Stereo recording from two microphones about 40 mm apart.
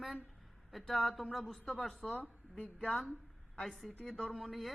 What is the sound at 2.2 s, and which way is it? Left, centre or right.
Speech, left.